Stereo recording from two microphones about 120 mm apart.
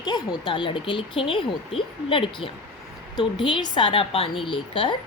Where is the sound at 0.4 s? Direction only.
45° left (ahead or behind).